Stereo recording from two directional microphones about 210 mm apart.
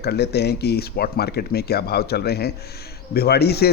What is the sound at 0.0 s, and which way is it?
A man's voice, 50° left (ahead or behind).